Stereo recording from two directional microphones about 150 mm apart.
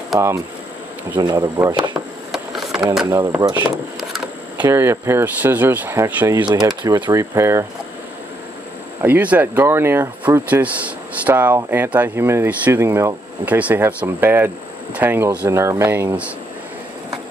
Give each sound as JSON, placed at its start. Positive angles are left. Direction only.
{"t": 1.1, "sound": "speech", "side_deg": -25}
{"t": 2.3, "sound": "a sound", "side_deg": 0}
{"t": 3.3, "sound": "speech", "side_deg": -25}
{"t": 4.6, "sound": "speech", "side_deg": -15}
{"t": 9.0, "sound": "speech", "side_deg": -10}